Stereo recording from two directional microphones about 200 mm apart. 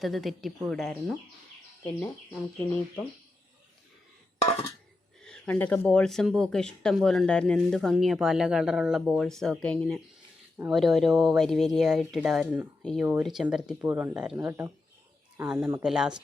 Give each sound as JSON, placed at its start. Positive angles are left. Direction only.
{"t": 0.0, "sound": "speech", "side_deg": 0}
{"t": 5.2, "sound": "a sound", "side_deg": 5}
{"t": 5.9, "sound": "speech", "side_deg": 5}